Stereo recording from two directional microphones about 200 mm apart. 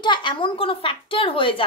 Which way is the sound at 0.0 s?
25° left (ahead or behind).